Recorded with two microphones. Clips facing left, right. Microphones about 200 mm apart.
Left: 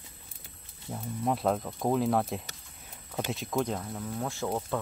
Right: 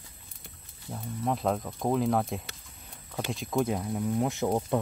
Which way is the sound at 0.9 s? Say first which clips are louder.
Even; centre (ahead or behind).